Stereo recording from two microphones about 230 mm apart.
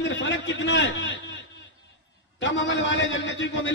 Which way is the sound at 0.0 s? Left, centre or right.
Left.